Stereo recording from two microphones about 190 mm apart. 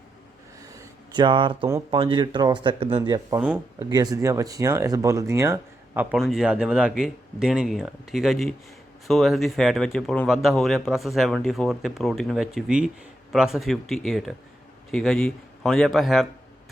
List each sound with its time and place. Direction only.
0.7 s a sound: 20° right (ahead or behind)
1.6 s speech: 15° right (ahead or behind)
3.4 s speech: 10° right (ahead or behind)
3.8 s speech: 20° right (ahead or behind)
6.1 s a man's voice: centre (ahead or behind)